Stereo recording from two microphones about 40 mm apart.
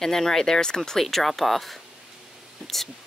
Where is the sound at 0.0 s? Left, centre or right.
Centre.